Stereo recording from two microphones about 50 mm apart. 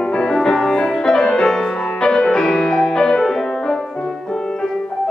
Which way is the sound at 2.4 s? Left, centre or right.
Centre.